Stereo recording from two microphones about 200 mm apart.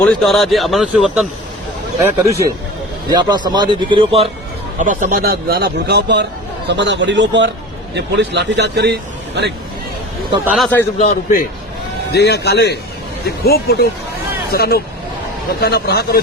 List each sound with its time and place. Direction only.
0.0 s speech: centre (ahead or behind)
2.0 s a man's voice: 15° right (ahead or behind)
4.8 s a man's voice: 40° right (ahead or behind); by 9.5 s 55° right (ahead or behind)
10.4 s speech: 5° right (ahead or behind)
12.1 s a man's voice: 55° left (ahead or behind)